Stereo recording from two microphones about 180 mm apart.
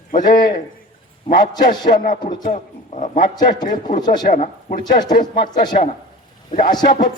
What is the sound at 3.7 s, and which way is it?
Speech, 50° left (ahead or behind).